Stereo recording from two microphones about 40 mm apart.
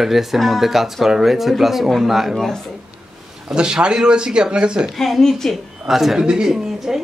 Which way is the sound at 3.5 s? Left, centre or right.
Right.